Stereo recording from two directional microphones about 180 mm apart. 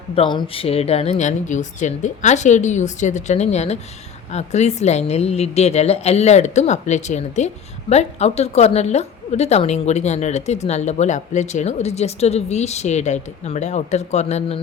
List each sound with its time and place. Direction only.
0.2 s a woman's voice: 25° left (ahead or behind)